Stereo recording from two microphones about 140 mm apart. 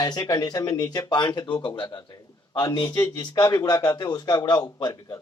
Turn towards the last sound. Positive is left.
turn(degrees=30)  # may be behind; listen again after turning